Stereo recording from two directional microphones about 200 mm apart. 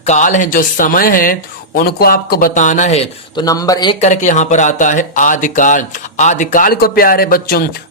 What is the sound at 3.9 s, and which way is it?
Speech, 35° left (ahead or behind).